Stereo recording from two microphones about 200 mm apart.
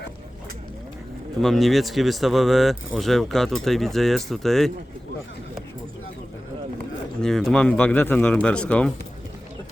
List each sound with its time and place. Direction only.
1.4 s speech: centre (ahead or behind)
7.2 s speech: centre (ahead or behind)